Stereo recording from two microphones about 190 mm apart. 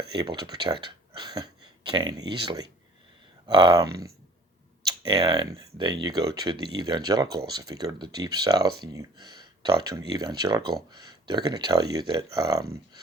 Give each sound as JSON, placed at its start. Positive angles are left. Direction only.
{"t": 0.1, "sound": "speech", "side_deg": -25}
{"t": 5.1, "sound": "speech", "side_deg": -20}